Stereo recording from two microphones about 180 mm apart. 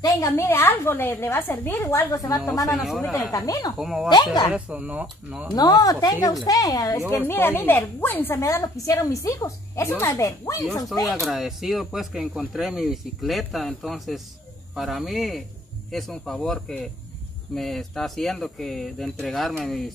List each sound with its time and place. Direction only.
0.0 s a woman's voice: 20° left (ahead or behind)
2.7 s speech: centre (ahead or behind)
3.0 s a woman's voice: 15° left (ahead or behind)
3.7 s speech: centre (ahead or behind)
5.5 s a woman's voice: 20° left (ahead or behind)
11.1 s speech: centre (ahead or behind)